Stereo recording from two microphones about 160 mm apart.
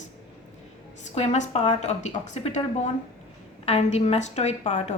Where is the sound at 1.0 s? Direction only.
45° left (ahead or behind).